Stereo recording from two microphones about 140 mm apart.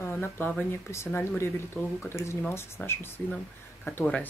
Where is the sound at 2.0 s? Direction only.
20° left (ahead or behind).